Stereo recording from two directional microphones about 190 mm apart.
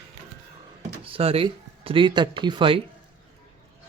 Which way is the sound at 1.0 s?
30° right (ahead or behind).